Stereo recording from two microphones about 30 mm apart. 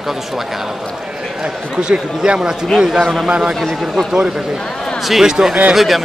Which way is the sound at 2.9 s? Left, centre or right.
Centre.